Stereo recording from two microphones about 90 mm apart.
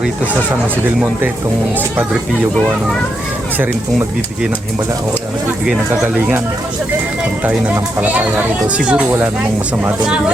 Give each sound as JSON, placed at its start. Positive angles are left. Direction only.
{"t": 7.4, "sound": "speech", "side_deg": -20}